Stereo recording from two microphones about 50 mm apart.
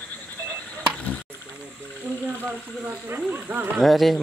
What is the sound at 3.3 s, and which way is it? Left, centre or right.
Speech, right.